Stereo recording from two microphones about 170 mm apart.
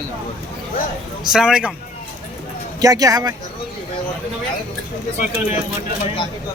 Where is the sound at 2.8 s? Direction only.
20° right (ahead or behind).